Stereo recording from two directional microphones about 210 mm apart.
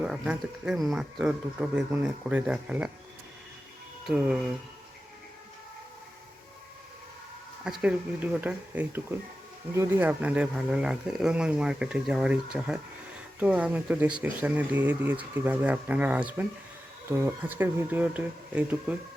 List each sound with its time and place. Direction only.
0.0 s speech: 5° right (ahead or behind)
4.0 s speech: 5° right (ahead or behind)
7.6 s speech: 5° right (ahead or behind)